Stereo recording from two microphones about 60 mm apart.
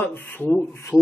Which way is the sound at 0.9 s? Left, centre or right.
Left.